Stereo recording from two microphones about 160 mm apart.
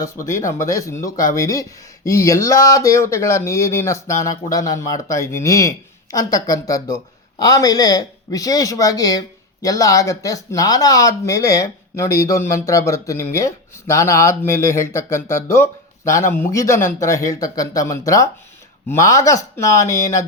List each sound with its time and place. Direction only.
0.3 s speech: 15° left (ahead or behind)